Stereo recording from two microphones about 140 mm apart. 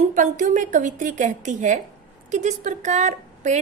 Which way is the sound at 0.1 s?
70° right (ahead or behind).